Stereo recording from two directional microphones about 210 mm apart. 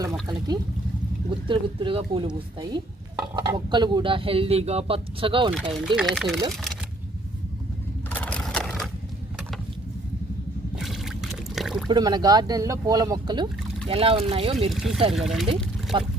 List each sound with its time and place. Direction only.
0.0 s speech: 20° right (ahead or behind)
6.0 s speech: centre (ahead or behind)
8.1 s a sound: 5° left (ahead or behind)
10.8 s trickle: centre (ahead or behind)
11.9 s speech: 20° right (ahead or behind)
14.7 s speech: centre (ahead or behind)
15.9 s speech: 20° right (ahead or behind)